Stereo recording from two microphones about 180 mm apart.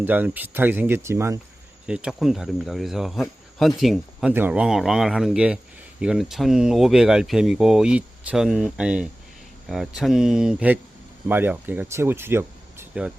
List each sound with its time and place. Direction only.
0.0 s speech: 10° right (ahead or behind)
1.9 s speech: 5° right (ahead or behind)